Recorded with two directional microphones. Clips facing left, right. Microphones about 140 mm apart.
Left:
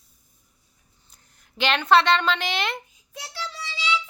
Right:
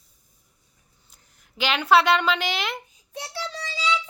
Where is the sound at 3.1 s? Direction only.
30° right (ahead or behind).